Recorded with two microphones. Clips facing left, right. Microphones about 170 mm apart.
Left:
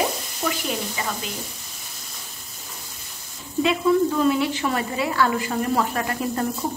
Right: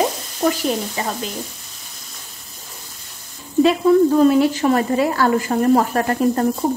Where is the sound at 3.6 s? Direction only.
40° right (ahead or behind).